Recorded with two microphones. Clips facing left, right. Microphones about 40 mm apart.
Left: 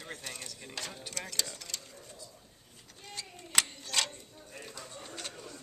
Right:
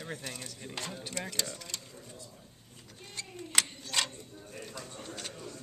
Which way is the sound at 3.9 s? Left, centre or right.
Centre.